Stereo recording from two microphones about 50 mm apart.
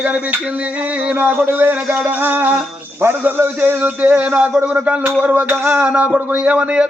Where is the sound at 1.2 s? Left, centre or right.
Right.